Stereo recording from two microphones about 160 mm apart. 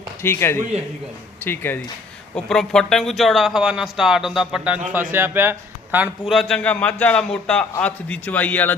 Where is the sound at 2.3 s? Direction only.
Centre (ahead or behind).